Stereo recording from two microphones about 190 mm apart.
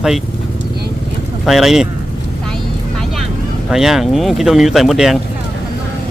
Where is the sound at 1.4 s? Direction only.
Centre (ahead or behind).